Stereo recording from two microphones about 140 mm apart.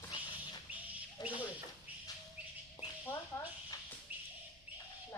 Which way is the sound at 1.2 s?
30° left (ahead or behind).